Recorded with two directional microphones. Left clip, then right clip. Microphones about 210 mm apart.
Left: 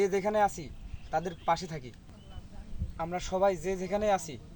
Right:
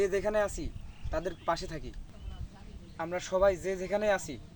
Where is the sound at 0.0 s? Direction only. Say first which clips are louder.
Left 2 dB; 10° right (ahead or behind).